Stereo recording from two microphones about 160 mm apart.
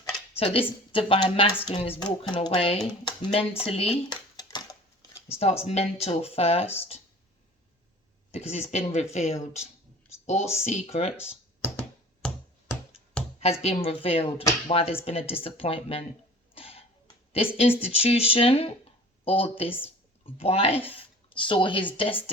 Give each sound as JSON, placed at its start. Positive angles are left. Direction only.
{"t": 0.3, "sound": "speech", "side_deg": 35}
{"t": 2.0, "sound": "speech", "side_deg": 25}
{"t": 4.1, "sound": "a sound", "side_deg": 25}
{"t": 5.3, "sound": "speech", "side_deg": 40}
{"t": 8.3, "sound": "speech", "side_deg": 40}
{"t": 13.4, "sound": "speech", "side_deg": 40}
{"t": 16.6, "sound": "cough", "side_deg": 35}
{"t": 17.3, "sound": "speech", "side_deg": 35}